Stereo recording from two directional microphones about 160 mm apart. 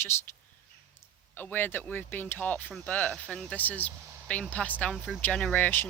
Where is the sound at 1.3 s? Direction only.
10° left (ahead or behind).